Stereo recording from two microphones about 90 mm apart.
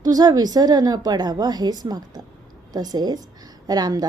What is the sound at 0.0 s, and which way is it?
A woman's voice, 45° right (ahead or behind).